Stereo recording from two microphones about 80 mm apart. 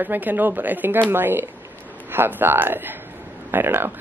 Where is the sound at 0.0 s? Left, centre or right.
Right.